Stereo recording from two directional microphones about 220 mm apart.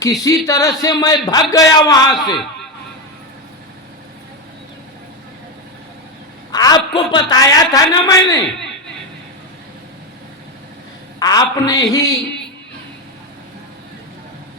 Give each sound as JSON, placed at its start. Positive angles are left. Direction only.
{"t": 0.0, "sound": "speech", "side_deg": 15}
{"t": 6.5, "sound": "speech", "side_deg": 20}
{"t": 11.2, "sound": "speech", "side_deg": 15}